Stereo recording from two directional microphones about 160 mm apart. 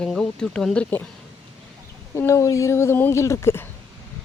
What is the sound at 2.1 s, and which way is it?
Speech, 20° left (ahead or behind).